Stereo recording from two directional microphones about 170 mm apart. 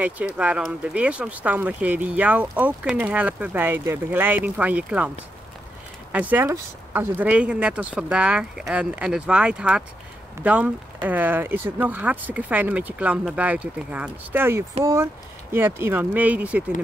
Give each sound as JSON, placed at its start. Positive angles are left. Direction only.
{"t": 0.0, "sound": "speech", "side_deg": -10}
{"t": 6.1, "sound": "speech", "side_deg": -10}